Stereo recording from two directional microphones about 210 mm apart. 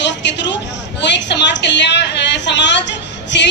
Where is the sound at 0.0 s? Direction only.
55° left (ahead or behind).